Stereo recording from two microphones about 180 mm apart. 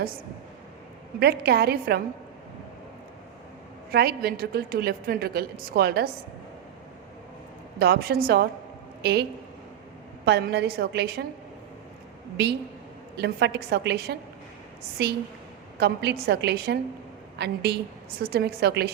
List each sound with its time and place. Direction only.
1.2 s a woman's voice: 60° right (ahead or behind)
3.9 s a woman's voice: 60° right (ahead or behind)
7.8 s a woman's voice: 60° right (ahead or behind)
10.2 s a woman's voice: 70° right (ahead or behind)
13.1 s a woman's voice: 65° right (ahead or behind)